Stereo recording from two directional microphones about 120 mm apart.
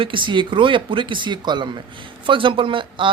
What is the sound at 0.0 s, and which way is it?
Speech, 45° right (ahead or behind).